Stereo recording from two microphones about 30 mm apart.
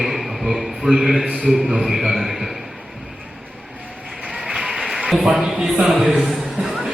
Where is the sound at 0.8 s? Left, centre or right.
Right.